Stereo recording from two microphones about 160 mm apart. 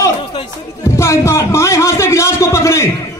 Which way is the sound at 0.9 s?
15° left (ahead or behind).